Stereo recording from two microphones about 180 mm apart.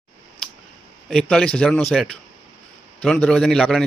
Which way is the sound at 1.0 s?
5° left (ahead or behind).